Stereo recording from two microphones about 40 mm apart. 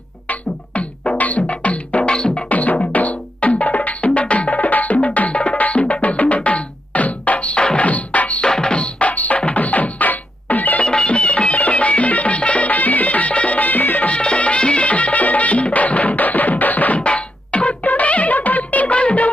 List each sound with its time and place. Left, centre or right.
0.3 s beatboxing: left
1.2 s music: left
2.0 s music: left
2.5 s music: left
7.9 s music: left
8.4 s music: centre; by 10.8 s left
10.8 s music: left
14.1 s music: left